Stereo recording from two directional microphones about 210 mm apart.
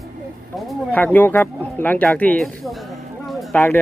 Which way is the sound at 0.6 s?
10° left (ahead or behind).